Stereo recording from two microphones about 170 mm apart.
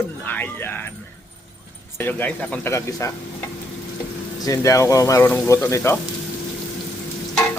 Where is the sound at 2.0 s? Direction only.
10° left (ahead or behind).